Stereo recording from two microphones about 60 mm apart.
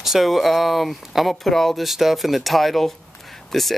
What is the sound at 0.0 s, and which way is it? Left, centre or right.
Speech, centre.